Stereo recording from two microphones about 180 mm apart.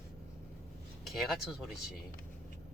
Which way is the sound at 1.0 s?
Centre (ahead or behind).